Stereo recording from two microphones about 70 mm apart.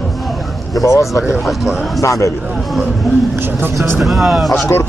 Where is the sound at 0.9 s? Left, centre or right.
Left.